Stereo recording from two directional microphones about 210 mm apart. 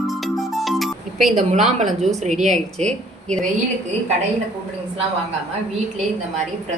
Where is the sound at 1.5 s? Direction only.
35° right (ahead or behind).